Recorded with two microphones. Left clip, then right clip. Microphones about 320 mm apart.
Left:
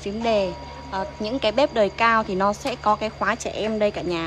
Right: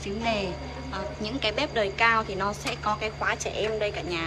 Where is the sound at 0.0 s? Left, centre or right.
Centre.